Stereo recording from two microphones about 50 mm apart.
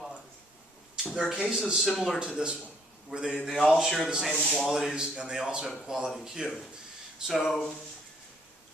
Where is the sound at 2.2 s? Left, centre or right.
Centre.